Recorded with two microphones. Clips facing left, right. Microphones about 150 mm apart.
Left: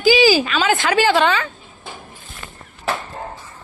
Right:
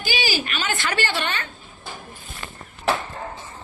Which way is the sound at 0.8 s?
75° left (ahead or behind).